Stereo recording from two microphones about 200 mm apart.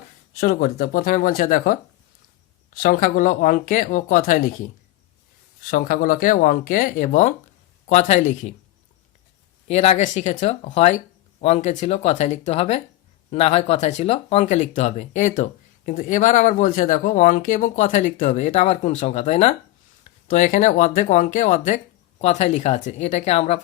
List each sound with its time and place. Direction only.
0.3 s speech: 45° left (ahead or behind)
2.8 s speech: 45° left (ahead or behind)
5.7 s speech: 45° left (ahead or behind)
9.6 s speech: 35° left (ahead or behind)